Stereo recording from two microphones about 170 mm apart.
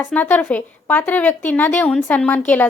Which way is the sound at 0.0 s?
10° left (ahead or behind).